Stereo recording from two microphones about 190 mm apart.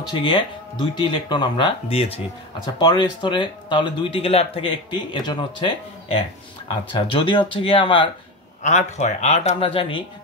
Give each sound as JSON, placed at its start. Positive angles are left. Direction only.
{"t": 0.2, "sound": "speech", "side_deg": 25}
{"t": 8.6, "sound": "speech", "side_deg": 35}